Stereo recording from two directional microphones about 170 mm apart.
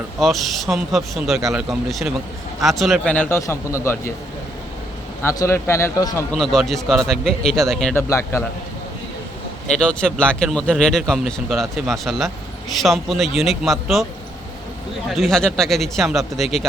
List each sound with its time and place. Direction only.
0.2 s a man's voice: centre (ahead or behind); by 4.1 s 15° left (ahead or behind)
5.2 s a man's voice: 20° left (ahead or behind)
6.3 s speech: centre (ahead or behind)
7.9 s a man's voice: 15° left (ahead or behind)
9.7 s speech: 5° left (ahead or behind)
15.1 s speech: centre (ahead or behind)